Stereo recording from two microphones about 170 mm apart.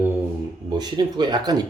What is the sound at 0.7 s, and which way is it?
Speech, 25° right (ahead or behind).